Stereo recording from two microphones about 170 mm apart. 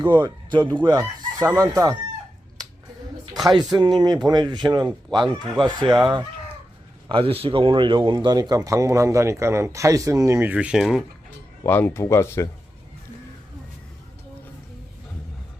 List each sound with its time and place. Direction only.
0.0 s speech: 25° right (ahead or behind)
0.9 s chicken: 20° right (ahead or behind)
3.3 s speech: 25° right (ahead or behind)
7.1 s speech: 35° right (ahead or behind); by 11.0 s centre (ahead or behind)
11.6 s speech: 10° left (ahead or behind)